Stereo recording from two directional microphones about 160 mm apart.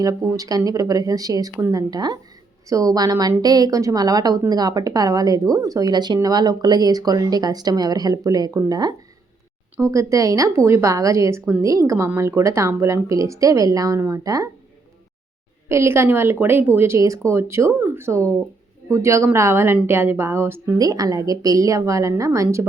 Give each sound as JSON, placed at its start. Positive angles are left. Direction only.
{"t": 0.0, "sound": "a woman's voice", "side_deg": -20}
{"t": 15.7, "sound": "a woman's voice", "side_deg": -15}